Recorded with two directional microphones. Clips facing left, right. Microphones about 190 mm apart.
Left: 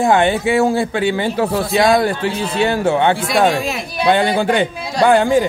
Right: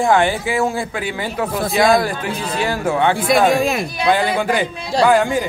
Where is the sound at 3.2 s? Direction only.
50° right (ahead or behind).